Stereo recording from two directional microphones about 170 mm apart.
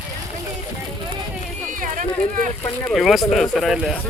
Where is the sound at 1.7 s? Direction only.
50° right (ahead or behind).